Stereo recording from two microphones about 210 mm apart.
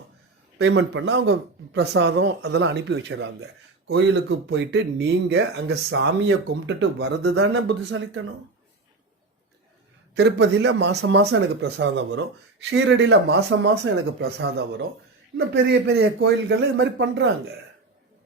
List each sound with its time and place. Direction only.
0.6 s speech: 60° right (ahead or behind)
10.2 s a man's voice: 55° right (ahead or behind)